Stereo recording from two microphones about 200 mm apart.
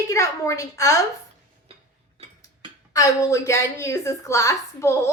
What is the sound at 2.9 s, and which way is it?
A woman's voice, 15° left (ahead or behind).